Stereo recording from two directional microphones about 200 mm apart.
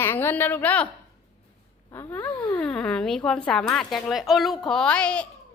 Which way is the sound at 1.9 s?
10° left (ahead or behind).